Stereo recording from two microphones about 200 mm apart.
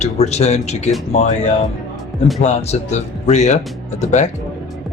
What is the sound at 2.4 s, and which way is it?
Speech, 35° left (ahead or behind).